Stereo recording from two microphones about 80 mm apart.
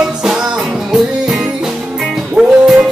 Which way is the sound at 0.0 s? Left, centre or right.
Centre.